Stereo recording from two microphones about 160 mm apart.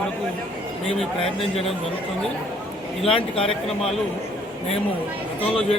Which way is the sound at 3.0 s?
35° left (ahead or behind).